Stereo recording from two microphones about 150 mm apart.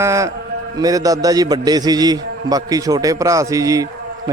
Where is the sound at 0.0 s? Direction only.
20° right (ahead or behind).